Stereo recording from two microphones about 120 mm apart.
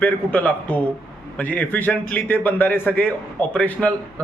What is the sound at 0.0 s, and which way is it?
A man's voice, 15° left (ahead or behind).